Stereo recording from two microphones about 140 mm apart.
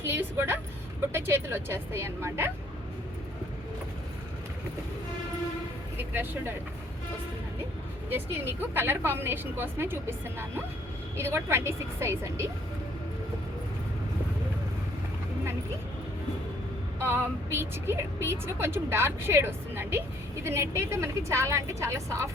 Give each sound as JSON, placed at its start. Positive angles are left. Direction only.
{"t": 0.1, "sound": "a woman's voice", "side_deg": -15}
{"t": 6.0, "sound": "a woman's voice", "side_deg": -15}
{"t": 8.1, "sound": "a woman's voice", "side_deg": -15}
{"t": 17.0, "sound": "a woman's voice", "side_deg": -15}